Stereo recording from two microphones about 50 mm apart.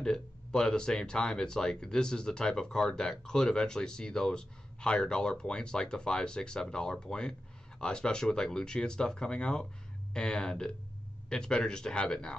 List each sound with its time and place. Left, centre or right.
0.0 s speech: centre